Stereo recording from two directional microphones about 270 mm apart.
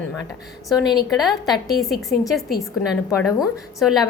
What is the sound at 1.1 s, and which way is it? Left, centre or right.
Speech, centre.